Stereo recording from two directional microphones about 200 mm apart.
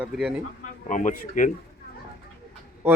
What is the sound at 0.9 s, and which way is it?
Speech, 40° left (ahead or behind).